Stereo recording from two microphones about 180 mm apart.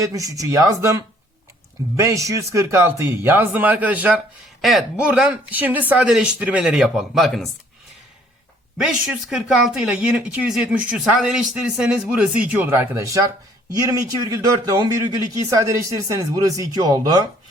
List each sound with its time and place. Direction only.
0.0 s a man's voice: 20° right (ahead or behind); by 7.4 s centre (ahead or behind)
8.9 s a man's voice: 5° right (ahead or behind); by 17.2 s 20° right (ahead or behind)